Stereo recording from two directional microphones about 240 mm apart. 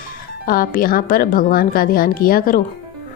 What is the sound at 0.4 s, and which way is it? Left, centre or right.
Speech, left.